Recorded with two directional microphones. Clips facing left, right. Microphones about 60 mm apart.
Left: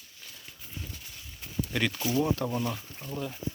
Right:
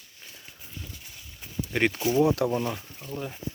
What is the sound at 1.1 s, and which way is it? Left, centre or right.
Horse, centre.